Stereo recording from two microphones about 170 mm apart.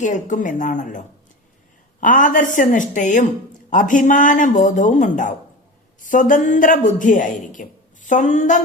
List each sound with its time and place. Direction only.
0.0 s a man's voice: 45° left (ahead or behind)